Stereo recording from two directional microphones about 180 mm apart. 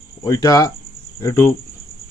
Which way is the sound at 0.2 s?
20° left (ahead or behind).